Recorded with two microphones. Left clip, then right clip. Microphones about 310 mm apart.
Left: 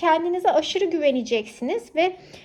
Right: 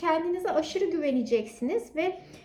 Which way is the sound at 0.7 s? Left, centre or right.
Centre.